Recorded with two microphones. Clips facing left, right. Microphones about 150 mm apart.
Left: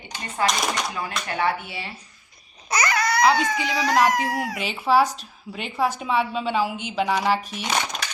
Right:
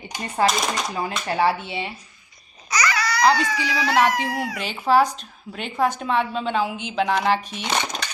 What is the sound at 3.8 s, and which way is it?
Speech, 45° left (ahead or behind).